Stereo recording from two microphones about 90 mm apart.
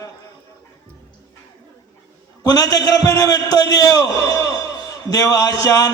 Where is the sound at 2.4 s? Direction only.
40° left (ahead or behind).